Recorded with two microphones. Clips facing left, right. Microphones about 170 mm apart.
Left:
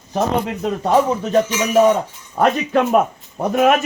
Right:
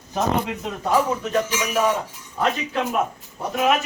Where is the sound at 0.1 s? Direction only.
45° left (ahead or behind).